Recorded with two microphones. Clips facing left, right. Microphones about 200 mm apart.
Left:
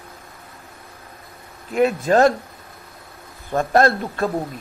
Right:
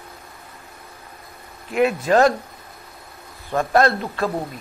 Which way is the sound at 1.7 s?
40° left (ahead or behind).